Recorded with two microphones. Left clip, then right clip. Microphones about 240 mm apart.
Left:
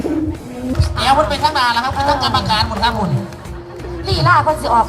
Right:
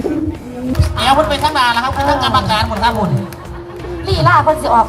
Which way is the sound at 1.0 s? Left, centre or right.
Centre.